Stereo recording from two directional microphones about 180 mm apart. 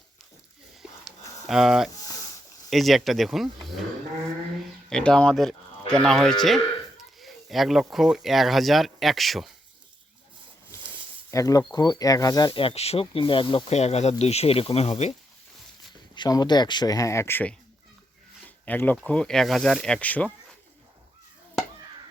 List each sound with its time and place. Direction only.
1.5 s speech: centre (ahead or behind)
4.9 s speech: 5° left (ahead or behind)
10.7 s a sound: 15° left (ahead or behind)
11.3 s speech: 20° left (ahead or behind); by 15.1 s 35° left (ahead or behind)
16.1 s speech: 25° left (ahead or behind); by 20.3 s 10° left (ahead or behind)